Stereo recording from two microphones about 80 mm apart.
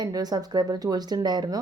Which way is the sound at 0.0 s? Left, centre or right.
Right.